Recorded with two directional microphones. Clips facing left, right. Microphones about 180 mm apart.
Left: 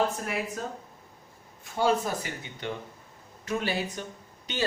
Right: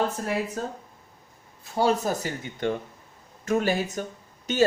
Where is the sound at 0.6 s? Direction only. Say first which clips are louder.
Right 3 dB; 35° right (ahead or behind).